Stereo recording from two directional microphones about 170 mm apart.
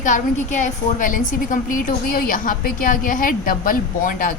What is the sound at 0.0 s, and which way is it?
A woman's voice, 45° left (ahead or behind).